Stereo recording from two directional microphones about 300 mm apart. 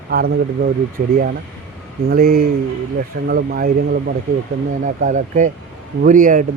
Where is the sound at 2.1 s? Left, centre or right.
Right.